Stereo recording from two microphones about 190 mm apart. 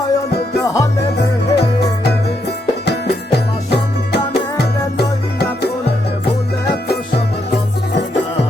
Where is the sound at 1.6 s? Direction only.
60° left (ahead or behind).